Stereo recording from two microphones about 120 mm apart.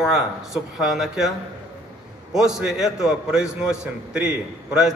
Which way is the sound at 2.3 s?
5° right (ahead or behind).